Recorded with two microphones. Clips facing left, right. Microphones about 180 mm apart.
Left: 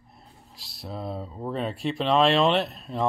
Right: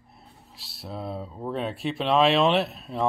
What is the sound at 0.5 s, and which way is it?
Speech, centre (ahead or behind).